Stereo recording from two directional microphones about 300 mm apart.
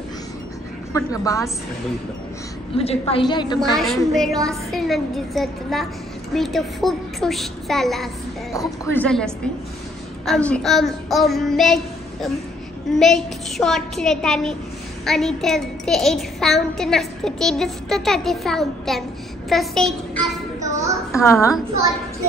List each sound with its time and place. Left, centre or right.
0.9 s a woman's voice: centre
2.7 s a woman's voice: centre
3.7 s a child's voice: centre
20.2 s child singing: centre
21.2 s a woman's voice: centre